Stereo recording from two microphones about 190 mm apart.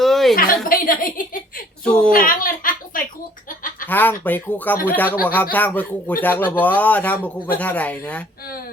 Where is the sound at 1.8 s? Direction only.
5° left (ahead or behind).